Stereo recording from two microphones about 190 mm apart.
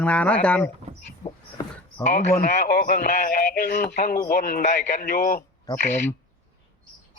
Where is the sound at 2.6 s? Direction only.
55° left (ahead or behind).